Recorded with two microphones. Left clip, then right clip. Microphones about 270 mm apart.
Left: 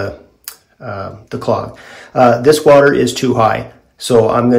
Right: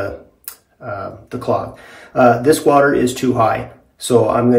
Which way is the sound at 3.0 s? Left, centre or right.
Left.